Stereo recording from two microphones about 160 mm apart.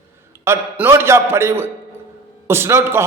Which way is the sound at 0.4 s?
15° right (ahead or behind).